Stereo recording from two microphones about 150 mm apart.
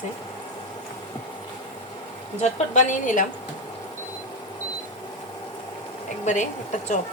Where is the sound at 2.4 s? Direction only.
55° left (ahead or behind).